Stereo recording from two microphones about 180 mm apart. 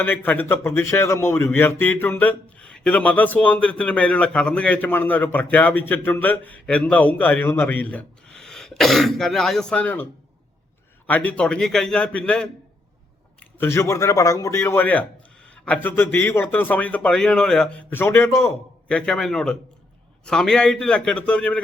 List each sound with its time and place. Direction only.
0.0 s a man's voice: 10° left (ahead or behind)